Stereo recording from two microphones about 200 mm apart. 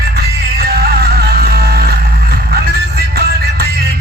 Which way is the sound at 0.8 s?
50° right (ahead or behind).